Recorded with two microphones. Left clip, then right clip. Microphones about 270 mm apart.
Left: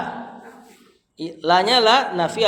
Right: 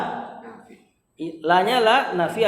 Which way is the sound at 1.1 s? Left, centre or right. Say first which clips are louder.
Left 1 dB; left.